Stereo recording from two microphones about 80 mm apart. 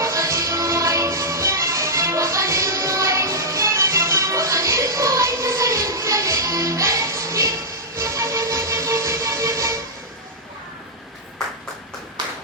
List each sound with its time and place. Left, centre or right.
0.0 s music: right
7.9 s vehicle: right